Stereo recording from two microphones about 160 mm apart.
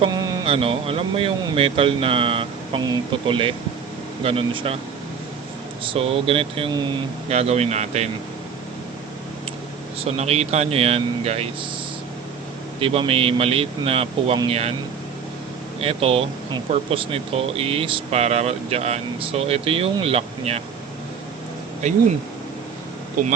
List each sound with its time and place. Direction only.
0.0 s a sound: 20° right (ahead or behind)
0.4 s speech: 35° right (ahead or behind)
5.8 s speech: 35° right (ahead or behind)
7.3 s speech: 40° right (ahead or behind)
10.0 s speech: 40° right (ahead or behind)
12.8 s speech: 35° right (ahead or behind)
15.8 s speech: 40° right (ahead or behind)